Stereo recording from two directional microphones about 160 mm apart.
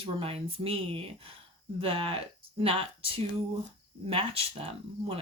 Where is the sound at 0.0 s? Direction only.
35° right (ahead or behind).